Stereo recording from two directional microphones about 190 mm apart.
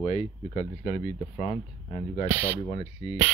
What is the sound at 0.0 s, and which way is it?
Speech, 30° left (ahead or behind).